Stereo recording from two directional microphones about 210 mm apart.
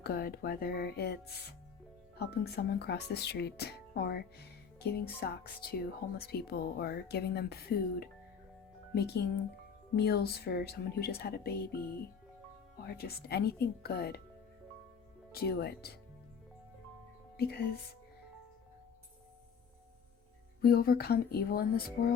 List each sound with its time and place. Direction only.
0.0 s speech: 45° left (ahead or behind)
12.8 s speech: 50° left (ahead or behind)
15.3 s speech: 45° left (ahead or behind)
17.3 s speech: 50° left (ahead or behind)
20.6 s speech: 45° left (ahead or behind)